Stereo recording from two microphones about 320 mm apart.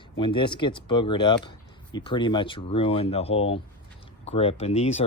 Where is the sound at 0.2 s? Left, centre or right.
Centre.